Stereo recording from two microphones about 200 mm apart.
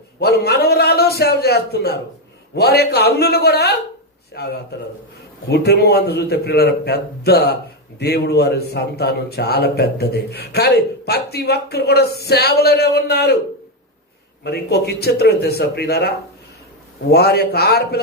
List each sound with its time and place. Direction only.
0.2 s a man's voice: 55° left (ahead or behind)
14.4 s a man's voice: 55° left (ahead or behind)